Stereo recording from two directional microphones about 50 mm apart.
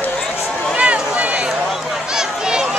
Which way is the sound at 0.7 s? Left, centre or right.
Right.